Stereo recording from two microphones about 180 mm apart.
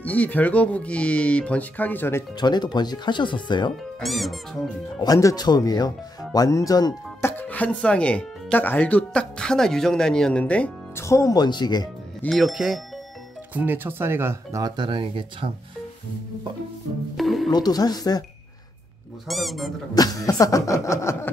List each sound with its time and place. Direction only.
0.0 s speech: 10° left (ahead or behind)
2.3 s speech: 25° left (ahead or behind)
4.0 s speech: centre (ahead or behind)
5.0 s speech: 20° left (ahead or behind)
12.2 s speech: centre (ahead or behind); by 15.5 s 30° right (ahead or behind)
17.2 s music: centre (ahead or behind)
17.5 s speech: 20° left (ahead or behind)
19.2 s speech: centre (ahead or behind)
19.9 s speech: 20° left (ahead or behind)